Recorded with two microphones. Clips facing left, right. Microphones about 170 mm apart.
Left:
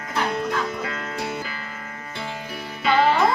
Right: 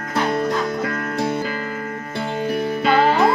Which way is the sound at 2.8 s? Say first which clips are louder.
Right 1 dB; 45° right (ahead or behind).